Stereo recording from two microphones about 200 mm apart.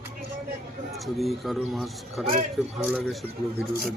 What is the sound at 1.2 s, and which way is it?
Speech, centre (ahead or behind).